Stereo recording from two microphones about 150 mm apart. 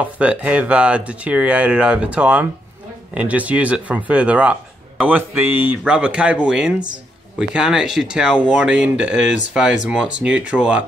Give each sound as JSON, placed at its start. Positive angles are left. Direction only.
{"t": 0.0, "sound": "speech", "side_deg": -10}